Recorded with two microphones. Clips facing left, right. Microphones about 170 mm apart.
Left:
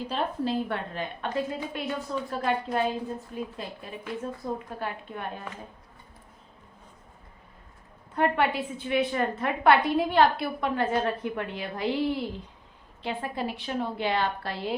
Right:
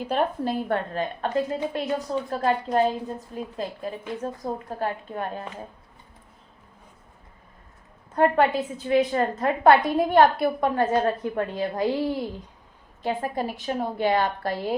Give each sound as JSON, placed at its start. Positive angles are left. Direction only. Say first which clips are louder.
{"t": 0.1, "sound": "a woman's voice", "louder": "right 4 dB", "side_deg": -50}
{"t": 8.1, "sound": "a woman's voice", "louder": "right 5 dB", "side_deg": -40}